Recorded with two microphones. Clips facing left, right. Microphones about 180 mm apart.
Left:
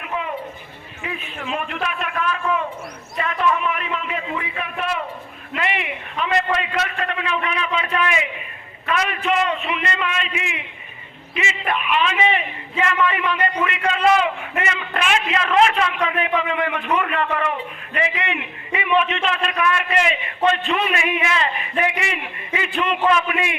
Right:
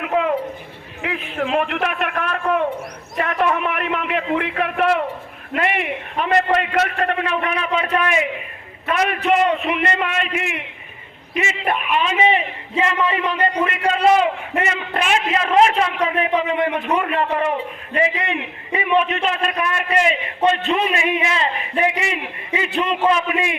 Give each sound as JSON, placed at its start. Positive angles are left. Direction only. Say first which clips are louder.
{"t": 0.0, "sound": "a sound", "louder": "right 8 dB", "side_deg": -90}
{"t": 1.0, "sound": "a man's voice", "louder": "right 6 dB", "side_deg": -90}
{"t": 2.4, "sound": "a sound", "louder": "right 4 dB", "side_deg": -60}
{"t": 5.5, "sound": "a man's voice", "louder": "right 4 dB", "side_deg": -50}
{"t": 12.1, "sound": "a man's voice", "louder": "right 3 dB", "side_deg": -35}
{"t": 22.7, "sound": "a man's voice", "louder": "even", "side_deg": -20}